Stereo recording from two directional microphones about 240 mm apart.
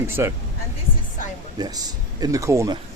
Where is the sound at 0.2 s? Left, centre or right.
Centre.